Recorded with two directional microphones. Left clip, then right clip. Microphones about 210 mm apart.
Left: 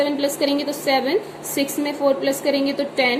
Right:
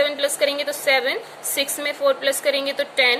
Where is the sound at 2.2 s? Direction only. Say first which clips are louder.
Even; 35° right (ahead or behind).